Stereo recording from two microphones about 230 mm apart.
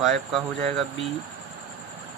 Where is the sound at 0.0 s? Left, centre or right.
Centre.